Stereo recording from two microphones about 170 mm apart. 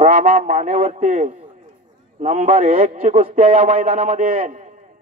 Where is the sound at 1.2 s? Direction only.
40° right (ahead or behind).